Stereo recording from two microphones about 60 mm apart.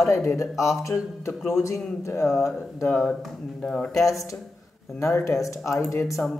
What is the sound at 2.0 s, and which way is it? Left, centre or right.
Speech, left.